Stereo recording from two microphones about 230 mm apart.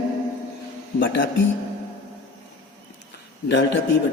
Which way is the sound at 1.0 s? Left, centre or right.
Left.